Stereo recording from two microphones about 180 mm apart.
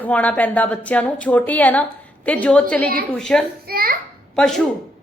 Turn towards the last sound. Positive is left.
turn(degrees=0)  # may be behind; listen again after turning